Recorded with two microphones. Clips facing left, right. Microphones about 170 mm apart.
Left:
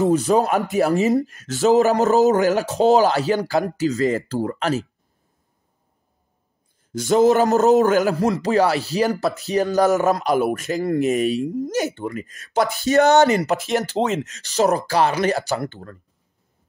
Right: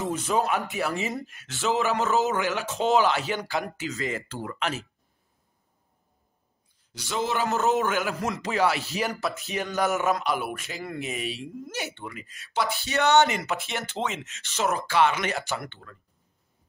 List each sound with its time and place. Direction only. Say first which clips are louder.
0.0 s a man's voice: left 9 dB; 40° left (ahead or behind)
6.9 s a man's voice: left 13 dB; 45° left (ahead or behind)